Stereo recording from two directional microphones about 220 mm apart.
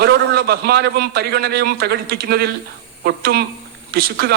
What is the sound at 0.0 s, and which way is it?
A man's voice, 45° right (ahead or behind).